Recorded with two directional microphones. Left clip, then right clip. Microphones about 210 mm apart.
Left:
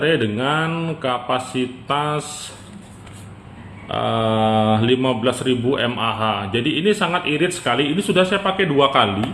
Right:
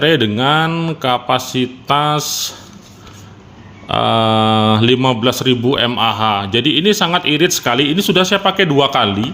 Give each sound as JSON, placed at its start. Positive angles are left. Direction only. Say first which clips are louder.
{"t": 0.0, "sound": "speech", "louder": "right 6 dB", "side_deg": -50}
{"t": 3.8, "sound": "speech", "louder": "right 7 dB", "side_deg": -50}